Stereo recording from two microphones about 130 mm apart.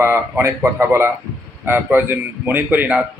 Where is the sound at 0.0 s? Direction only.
20° right (ahead or behind).